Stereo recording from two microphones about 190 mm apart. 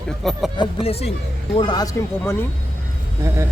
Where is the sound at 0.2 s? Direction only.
Centre (ahead or behind).